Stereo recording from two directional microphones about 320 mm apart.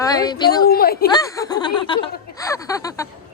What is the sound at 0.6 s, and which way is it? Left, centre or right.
Speech, left.